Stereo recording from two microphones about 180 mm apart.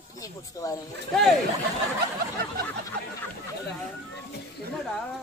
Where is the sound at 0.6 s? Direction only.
20° left (ahead or behind).